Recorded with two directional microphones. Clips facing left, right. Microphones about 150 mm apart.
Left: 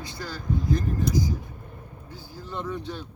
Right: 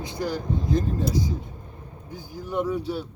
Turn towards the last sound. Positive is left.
turn(degrees=-10)  # may be behind; listen again after turning